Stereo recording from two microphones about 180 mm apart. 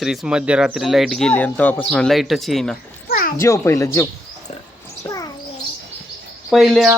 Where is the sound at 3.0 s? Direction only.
55° left (ahead or behind).